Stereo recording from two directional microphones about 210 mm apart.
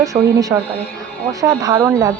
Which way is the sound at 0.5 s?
15° right (ahead or behind).